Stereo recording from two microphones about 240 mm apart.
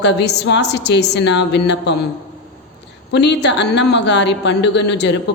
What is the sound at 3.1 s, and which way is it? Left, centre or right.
A woman's voice, left.